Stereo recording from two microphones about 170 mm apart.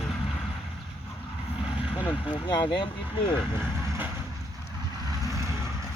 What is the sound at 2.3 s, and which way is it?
Speech, 25° left (ahead or behind).